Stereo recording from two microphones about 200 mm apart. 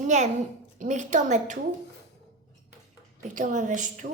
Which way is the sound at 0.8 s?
40° right (ahead or behind).